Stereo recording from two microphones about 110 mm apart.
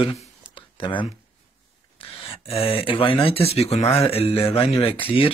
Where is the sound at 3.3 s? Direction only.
65° left (ahead or behind).